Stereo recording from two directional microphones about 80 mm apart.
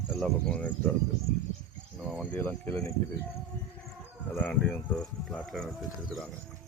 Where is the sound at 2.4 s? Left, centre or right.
Left.